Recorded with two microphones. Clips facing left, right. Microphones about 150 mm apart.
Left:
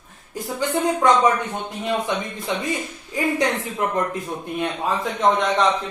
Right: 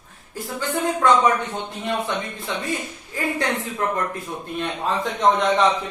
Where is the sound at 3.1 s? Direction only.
20° left (ahead or behind).